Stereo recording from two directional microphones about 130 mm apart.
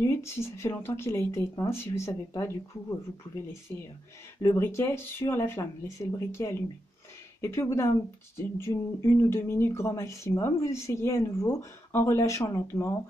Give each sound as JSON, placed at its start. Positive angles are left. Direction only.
{"t": 0.0, "sound": "speech", "side_deg": 20}
{"t": 3.7, "sound": "speech", "side_deg": 20}